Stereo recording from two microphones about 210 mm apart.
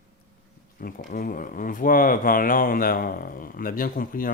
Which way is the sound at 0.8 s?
45° left (ahead or behind).